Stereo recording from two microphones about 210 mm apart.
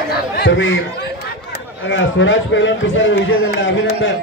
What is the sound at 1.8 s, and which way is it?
A man's voice, 60° left (ahead or behind).